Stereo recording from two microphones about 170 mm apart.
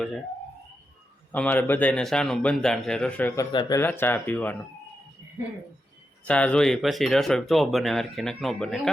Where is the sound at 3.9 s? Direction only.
10° left (ahead or behind).